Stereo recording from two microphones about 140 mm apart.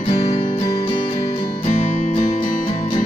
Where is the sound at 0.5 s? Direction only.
35° left (ahead or behind).